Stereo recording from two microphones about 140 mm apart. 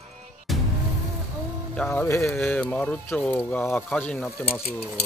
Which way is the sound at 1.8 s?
20° left (ahead or behind).